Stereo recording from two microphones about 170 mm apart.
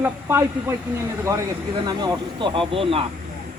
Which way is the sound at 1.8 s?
25° right (ahead or behind).